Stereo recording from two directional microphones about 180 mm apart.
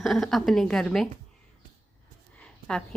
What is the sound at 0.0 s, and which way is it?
A woman's voice, centre (ahead or behind).